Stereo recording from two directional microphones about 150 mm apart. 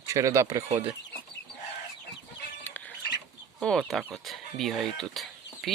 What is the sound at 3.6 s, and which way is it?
Speech, 5° left (ahead or behind).